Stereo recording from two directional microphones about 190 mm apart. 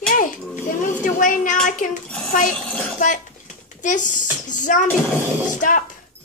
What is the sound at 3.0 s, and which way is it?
A woman's voice, 40° left (ahead or behind).